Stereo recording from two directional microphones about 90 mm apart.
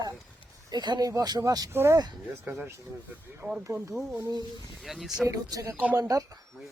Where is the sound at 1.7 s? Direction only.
30° right (ahead or behind).